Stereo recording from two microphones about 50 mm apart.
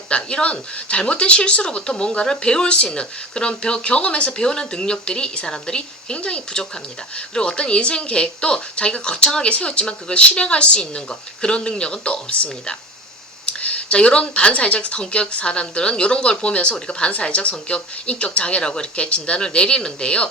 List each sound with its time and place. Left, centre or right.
0.1 s speech: left